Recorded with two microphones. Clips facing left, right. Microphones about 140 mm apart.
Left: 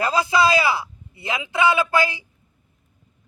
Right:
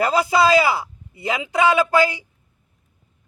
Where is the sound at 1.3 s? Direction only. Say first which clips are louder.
Right 3 dB; 40° right (ahead or behind).